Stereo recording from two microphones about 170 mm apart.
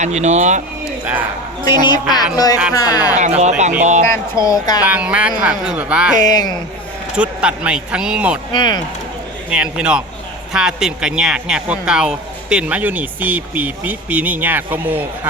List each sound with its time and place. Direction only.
0.0 s speech: 45° right (ahead or behind)
1.6 s speech: 25° left (ahead or behind)
3.2 s speech: 45° right (ahead or behind)
4.0 s speech: 15° left (ahead or behind)
4.8 s speech: 5° right (ahead or behind)
6.1 s speech: 25° left (ahead or behind)
7.2 s speech: 5° right (ahead or behind)
8.5 s speech: 25° left (ahead or behind)
9.5 s a man's voice: 5° right (ahead or behind)